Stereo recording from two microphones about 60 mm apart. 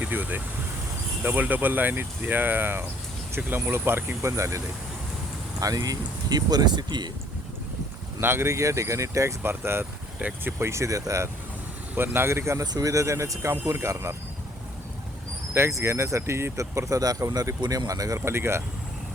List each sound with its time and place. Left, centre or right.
0.1 s speech: right
4.2 s speech: right
5.5 s speech: right
8.2 s speech: right
8.5 s speech: right
9.4 s speech: right
10.2 s speech: right
10.6 s speech: right
11.9 s speech: right
12.8 s speech: right
15.5 s speech: right
18.3 s speech: right